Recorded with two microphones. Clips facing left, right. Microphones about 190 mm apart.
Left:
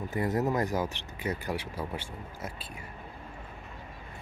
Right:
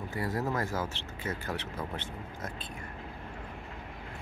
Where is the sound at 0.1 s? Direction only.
20° left (ahead or behind).